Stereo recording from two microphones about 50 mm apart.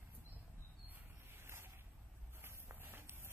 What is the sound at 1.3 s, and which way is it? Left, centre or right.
Vehicle, right.